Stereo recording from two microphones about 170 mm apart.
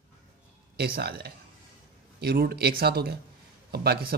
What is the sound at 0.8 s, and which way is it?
Speech, 65° right (ahead or behind).